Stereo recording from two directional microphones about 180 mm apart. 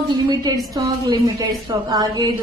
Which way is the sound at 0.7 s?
20° right (ahead or behind).